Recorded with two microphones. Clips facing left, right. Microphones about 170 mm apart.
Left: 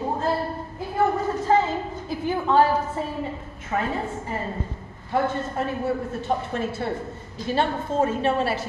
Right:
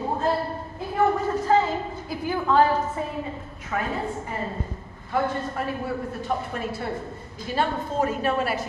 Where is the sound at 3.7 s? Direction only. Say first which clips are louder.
Left 2 dB; 30° left (ahead or behind).